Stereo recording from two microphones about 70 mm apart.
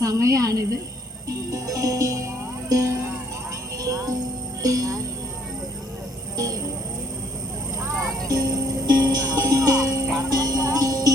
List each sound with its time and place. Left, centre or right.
0.0 s a woman's voice: right
1.3 s music: right
6.3 s a sound: right
8.3 s music: right